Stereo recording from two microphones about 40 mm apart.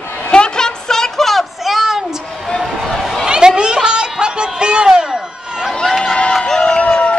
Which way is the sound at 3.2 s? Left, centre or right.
Centre.